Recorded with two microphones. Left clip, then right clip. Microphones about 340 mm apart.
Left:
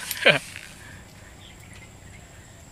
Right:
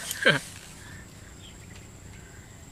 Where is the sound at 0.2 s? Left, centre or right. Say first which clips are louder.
Left 4 dB; centre.